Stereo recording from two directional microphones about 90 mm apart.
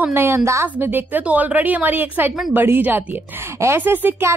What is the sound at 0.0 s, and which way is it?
A woman's voice, 25° right (ahead or behind).